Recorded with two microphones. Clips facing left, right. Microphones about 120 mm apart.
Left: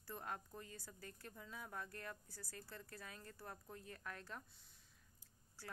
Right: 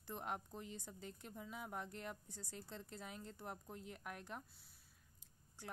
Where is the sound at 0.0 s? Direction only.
20° right (ahead or behind).